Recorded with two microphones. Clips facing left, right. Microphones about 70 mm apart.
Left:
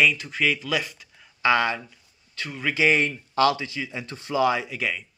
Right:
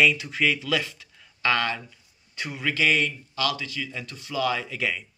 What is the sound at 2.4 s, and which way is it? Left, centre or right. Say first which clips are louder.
Speech: even; centre.